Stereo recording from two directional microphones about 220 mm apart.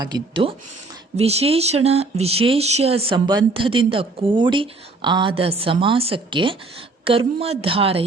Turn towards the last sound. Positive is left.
turn(degrees=-25)  # may be behind; listen again after turning